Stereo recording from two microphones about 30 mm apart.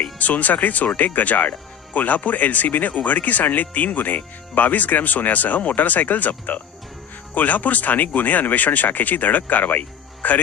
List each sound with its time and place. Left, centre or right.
0.2 s speech: left
2.9 s speech: left